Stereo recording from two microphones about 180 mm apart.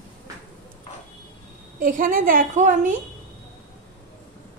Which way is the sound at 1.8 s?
50° right (ahead or behind).